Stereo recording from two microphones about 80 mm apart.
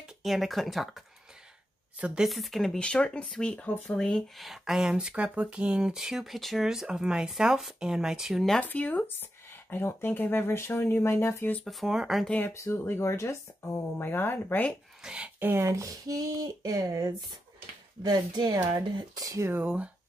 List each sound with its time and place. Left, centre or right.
0.2 s speech: centre
2.0 s speech: centre
2.2 s speech: centre
4.4 s speech: centre
8.5 s speech: centre
11.6 s speech: centre
12.4 s speech: left
14.0 s speech: left
15.0 s speech: centre
15.3 s a sound: right
15.6 s speech: right
18.0 s a woman's voice: right
18.9 s speech: right
19.6 s speech: centre